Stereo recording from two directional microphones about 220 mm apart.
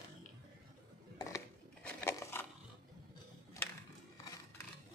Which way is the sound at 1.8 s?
5° left (ahead or behind).